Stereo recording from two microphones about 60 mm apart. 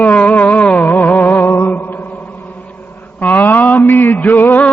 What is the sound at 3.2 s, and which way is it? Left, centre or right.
Music, left.